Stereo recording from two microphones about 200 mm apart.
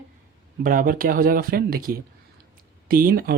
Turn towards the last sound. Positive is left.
turn(degrees=-45)  # may be behind; listen again after turning